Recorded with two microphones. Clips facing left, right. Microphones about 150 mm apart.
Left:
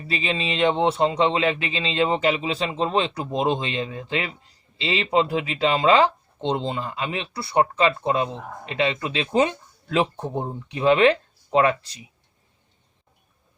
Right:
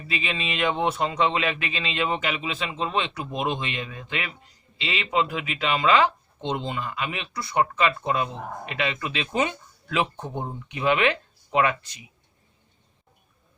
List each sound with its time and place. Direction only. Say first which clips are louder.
0.1 s speech: left 4 dB; 30° left (ahead or behind)